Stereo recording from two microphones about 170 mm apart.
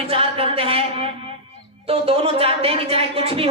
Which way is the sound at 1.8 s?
35° right (ahead or behind).